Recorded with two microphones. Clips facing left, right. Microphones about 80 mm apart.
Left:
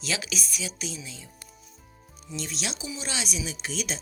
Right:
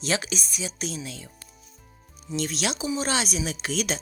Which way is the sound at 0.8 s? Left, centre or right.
Right.